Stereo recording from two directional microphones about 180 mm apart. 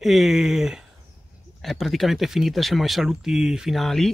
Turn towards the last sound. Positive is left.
turn(degrees=0)  # may be behind; listen again after turning